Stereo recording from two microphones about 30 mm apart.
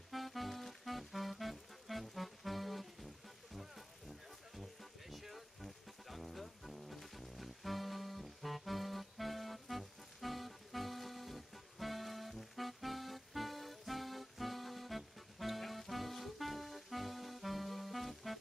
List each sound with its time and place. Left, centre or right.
0.1 s music: centre
5.1 s music: centre